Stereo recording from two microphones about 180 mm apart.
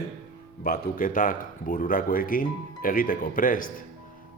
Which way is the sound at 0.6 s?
50° left (ahead or behind).